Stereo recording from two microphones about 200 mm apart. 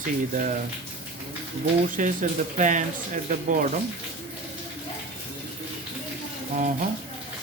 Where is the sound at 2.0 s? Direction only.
40° right (ahead or behind).